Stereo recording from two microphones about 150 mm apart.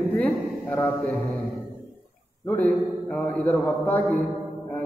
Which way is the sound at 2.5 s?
10° left (ahead or behind).